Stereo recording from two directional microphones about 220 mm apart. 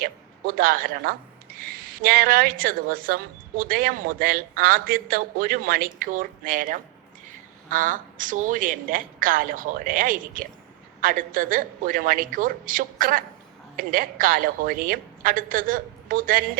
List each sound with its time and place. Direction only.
0.0 s a woman's voice: 40° right (ahead or behind)